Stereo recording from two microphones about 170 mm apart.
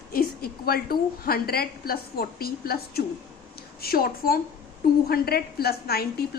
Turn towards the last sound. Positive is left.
turn(degrees=65)  # may be behind; listen again after turning